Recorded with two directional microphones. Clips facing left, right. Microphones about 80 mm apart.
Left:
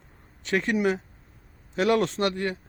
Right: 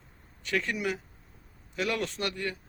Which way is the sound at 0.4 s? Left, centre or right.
Left.